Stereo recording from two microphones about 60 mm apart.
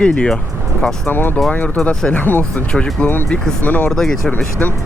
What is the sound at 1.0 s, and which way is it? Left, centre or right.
Speech, left.